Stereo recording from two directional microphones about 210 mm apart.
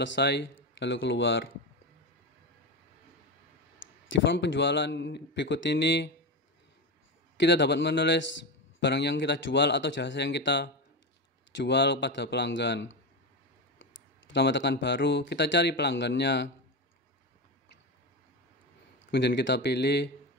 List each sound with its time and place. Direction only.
0.0 s speech: 55° left (ahead or behind)
4.2 s speech: 60° left (ahead or behind)
7.3 s speech: 55° left (ahead or behind)
19.0 s speech: 55° left (ahead or behind)